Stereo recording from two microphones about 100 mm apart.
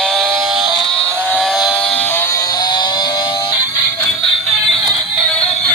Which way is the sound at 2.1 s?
25° left (ahead or behind).